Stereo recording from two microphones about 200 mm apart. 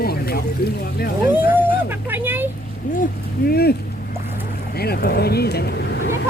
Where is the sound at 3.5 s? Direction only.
50° left (ahead or behind).